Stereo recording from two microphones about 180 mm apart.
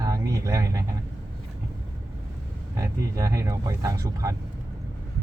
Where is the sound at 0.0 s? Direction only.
20° right (ahead or behind).